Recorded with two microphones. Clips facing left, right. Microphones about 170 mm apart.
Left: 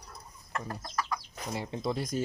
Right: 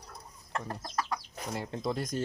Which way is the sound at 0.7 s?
30° right (ahead or behind).